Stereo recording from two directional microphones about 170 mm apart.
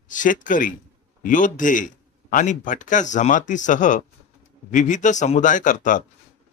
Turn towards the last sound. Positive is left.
turn(degrees=50)  # may be behind; listen again after turning